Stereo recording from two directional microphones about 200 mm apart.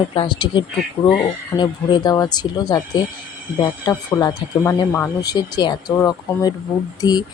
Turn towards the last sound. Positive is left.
turn(degrees=20)  # may be behind; listen again after turning